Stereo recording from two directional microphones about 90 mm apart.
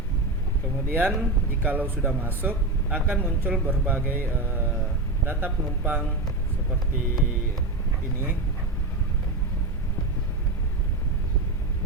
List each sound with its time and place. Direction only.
0.9 s speech: 20° right (ahead or behind)